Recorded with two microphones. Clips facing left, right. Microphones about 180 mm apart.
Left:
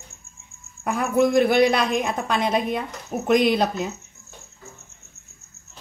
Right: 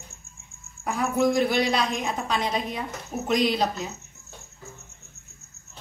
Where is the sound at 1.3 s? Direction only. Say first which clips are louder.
Left 6 dB; 55° left (ahead or behind).